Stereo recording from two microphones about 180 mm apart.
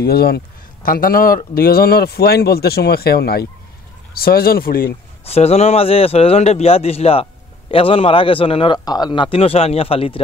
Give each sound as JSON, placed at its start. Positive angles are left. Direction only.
{"t": 0.0, "sound": "speech", "side_deg": 60}
{"t": 5.2, "sound": "a man's voice", "side_deg": 35}